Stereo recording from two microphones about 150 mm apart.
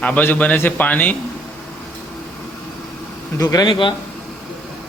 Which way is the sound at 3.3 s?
25° left (ahead or behind).